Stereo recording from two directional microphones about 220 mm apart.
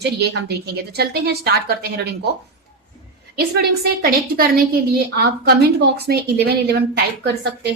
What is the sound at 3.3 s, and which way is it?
Speech, 45° right (ahead or behind).